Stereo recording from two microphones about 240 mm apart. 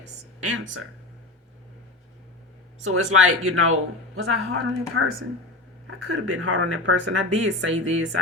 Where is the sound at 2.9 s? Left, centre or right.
Right.